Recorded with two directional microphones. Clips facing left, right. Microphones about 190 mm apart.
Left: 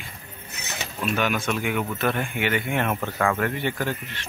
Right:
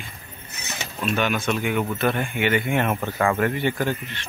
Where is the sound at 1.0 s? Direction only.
5° left (ahead or behind).